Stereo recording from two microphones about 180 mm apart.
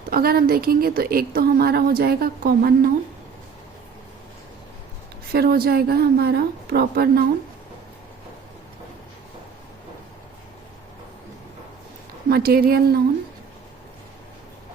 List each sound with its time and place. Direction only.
0.1 s a woman's voice: 55° right (ahead or behind)
5.3 s a woman's voice: 60° right (ahead or behind)
12.3 s a woman's voice: 55° right (ahead or behind)